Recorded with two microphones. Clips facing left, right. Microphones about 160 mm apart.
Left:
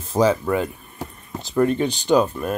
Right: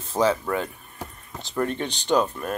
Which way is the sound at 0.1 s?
5° left (ahead or behind).